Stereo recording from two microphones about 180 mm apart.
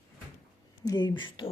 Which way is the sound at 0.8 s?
25° left (ahead or behind).